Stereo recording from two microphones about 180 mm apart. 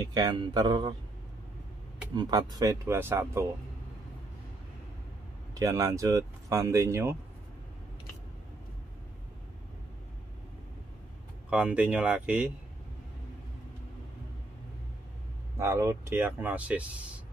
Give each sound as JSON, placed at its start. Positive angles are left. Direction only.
{"t": 0.0, "sound": "speech", "side_deg": -20}
{"t": 2.1, "sound": "speech", "side_deg": -20}
{"t": 5.5, "sound": "speech", "side_deg": -15}
{"t": 11.5, "sound": "speech", "side_deg": -5}
{"t": 15.5, "sound": "speech", "side_deg": -15}